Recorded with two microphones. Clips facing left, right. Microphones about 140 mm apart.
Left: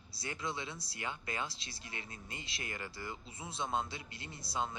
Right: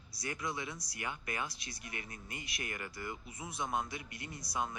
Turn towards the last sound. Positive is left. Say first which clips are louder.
# even
turn(degrees=25)  # may be behind; listen again after turning